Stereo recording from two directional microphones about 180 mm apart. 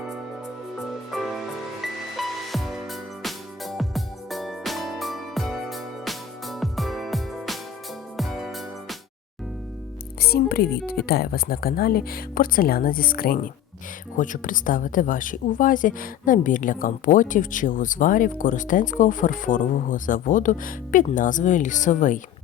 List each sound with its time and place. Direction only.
0.8 s music: centre (ahead or behind)
10.2 s a woman's voice: 60° left (ahead or behind)